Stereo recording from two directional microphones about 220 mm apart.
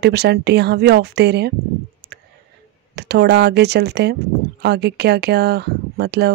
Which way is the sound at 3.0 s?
50° right (ahead or behind).